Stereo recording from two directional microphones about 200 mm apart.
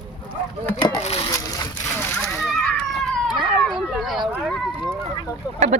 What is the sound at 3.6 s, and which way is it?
Speech, centre (ahead or behind).